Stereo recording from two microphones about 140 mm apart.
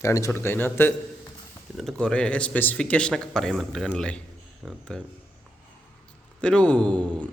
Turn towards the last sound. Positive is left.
turn(degrees=10)  # may be behind; listen again after turning